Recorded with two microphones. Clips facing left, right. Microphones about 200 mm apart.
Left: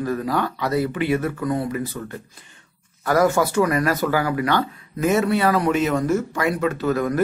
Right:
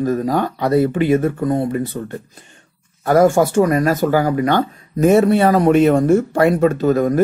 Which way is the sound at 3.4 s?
45° right (ahead or behind).